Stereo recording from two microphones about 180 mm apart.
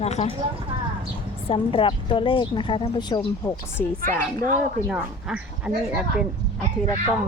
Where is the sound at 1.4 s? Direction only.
30° left (ahead or behind).